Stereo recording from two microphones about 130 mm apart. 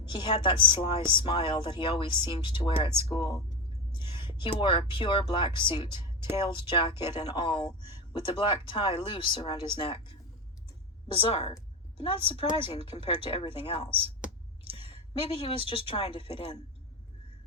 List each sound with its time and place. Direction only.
0.1 s a woman's voice: 40° left (ahead or behind)